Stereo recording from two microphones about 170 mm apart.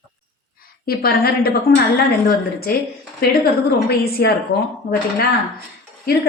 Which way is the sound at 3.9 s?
70° left (ahead or behind).